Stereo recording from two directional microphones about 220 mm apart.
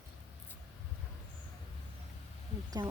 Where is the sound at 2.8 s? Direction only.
20° right (ahead or behind).